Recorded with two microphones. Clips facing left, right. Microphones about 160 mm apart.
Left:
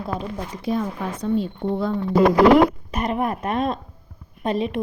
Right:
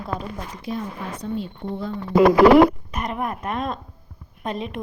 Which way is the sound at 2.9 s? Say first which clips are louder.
Left 4 dB; 30° left (ahead or behind).